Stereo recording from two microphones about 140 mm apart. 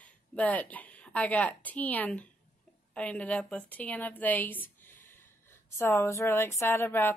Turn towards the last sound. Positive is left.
turn(degrees=15)  # may be behind; listen again after turning